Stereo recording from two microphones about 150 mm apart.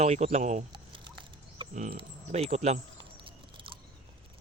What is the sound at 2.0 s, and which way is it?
Speech, 45° right (ahead or behind).